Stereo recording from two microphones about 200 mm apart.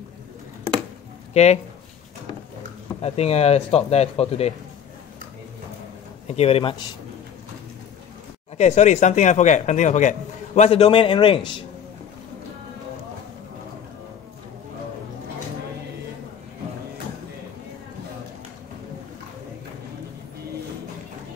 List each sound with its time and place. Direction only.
1.3 s speech: 35° left (ahead or behind)
3.0 s speech: 30° left (ahead or behind)
6.2 s a man's voice: 30° left (ahead or behind)
8.5 s speech: 35° left (ahead or behind)